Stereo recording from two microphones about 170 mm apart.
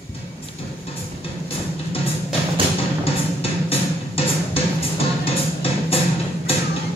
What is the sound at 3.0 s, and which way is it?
Music, 35° left (ahead or behind).